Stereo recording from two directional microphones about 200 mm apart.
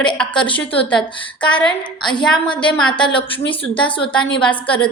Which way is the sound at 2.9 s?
25° left (ahead or behind).